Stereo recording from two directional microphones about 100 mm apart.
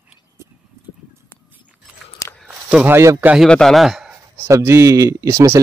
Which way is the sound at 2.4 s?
5° right (ahead or behind).